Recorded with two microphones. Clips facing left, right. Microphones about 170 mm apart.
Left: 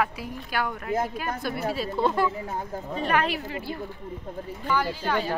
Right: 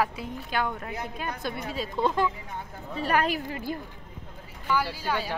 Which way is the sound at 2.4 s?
40° left (ahead or behind).